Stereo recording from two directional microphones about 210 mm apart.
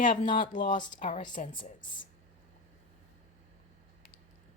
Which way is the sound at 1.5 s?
25° left (ahead or behind).